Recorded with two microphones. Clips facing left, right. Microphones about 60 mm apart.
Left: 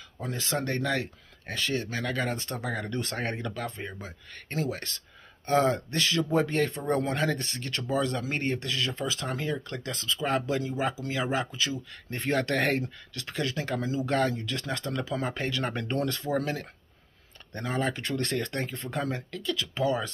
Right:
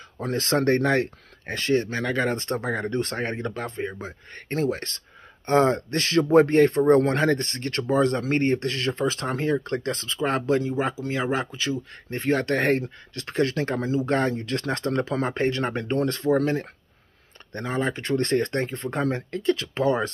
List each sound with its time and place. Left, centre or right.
0.2 s speech: right
5.5 s speech: right
12.3 s speech: centre
12.7 s speech: right
15.6 s speech: right
17.8 s speech: right
18.1 s speech: right